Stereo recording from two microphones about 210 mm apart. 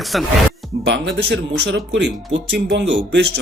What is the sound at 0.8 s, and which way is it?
Speech, 55° right (ahead or behind).